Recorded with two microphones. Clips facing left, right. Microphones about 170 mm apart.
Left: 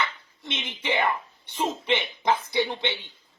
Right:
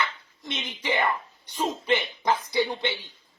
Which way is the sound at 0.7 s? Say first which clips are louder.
Even; 25° left (ahead or behind).